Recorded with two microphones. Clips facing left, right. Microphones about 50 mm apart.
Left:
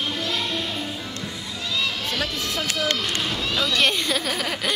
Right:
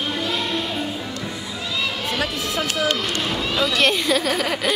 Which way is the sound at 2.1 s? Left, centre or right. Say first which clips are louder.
Right 3 dB; centre.